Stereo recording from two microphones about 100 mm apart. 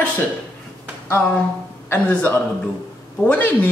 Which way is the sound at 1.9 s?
20° left (ahead or behind).